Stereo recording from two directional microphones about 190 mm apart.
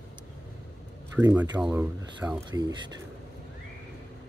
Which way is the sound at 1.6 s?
10° right (ahead or behind).